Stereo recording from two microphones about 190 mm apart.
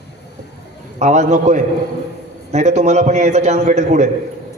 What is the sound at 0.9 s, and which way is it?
A man's voice, 35° right (ahead or behind).